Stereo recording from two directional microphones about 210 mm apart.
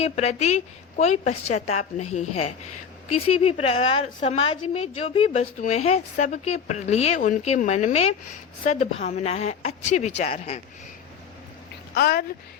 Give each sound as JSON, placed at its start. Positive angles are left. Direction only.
{"t": 0.0, "sound": "a woman's voice", "side_deg": 30}
{"t": 11.9, "sound": "speech", "side_deg": 50}